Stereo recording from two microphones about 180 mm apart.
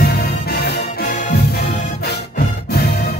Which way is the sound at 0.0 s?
60° left (ahead or behind).